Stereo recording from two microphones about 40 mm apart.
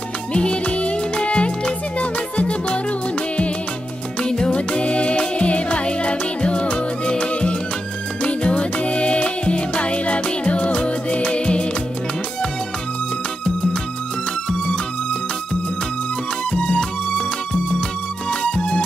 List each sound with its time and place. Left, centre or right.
0.3 s music: left
4.2 s music: centre
16.5 s music: left